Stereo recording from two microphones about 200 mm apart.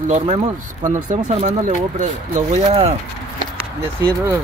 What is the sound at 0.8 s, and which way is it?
Speech, 40° right (ahead or behind).